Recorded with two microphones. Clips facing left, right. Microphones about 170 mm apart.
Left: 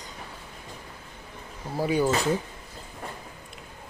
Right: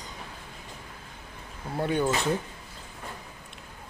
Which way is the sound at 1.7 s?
5° left (ahead or behind).